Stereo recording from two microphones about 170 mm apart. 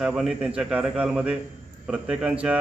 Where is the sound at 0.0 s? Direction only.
Centre (ahead or behind).